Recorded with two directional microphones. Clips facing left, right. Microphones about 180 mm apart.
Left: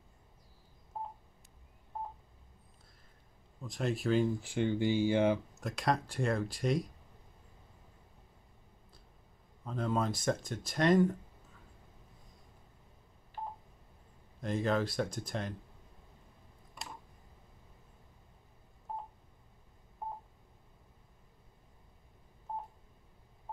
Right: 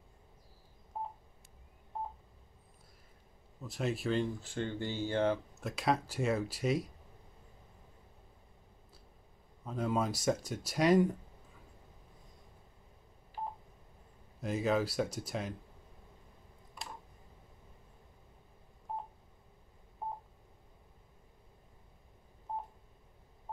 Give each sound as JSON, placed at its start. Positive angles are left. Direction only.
{"t": 1.0, "sound": "telephone dialing", "side_deg": -10}
{"t": 3.6, "sound": "speech", "side_deg": -5}
{"t": 5.5, "sound": "speech", "side_deg": 0}
{"t": 9.7, "sound": "speech", "side_deg": -5}
{"t": 14.4, "sound": "speech", "side_deg": -5}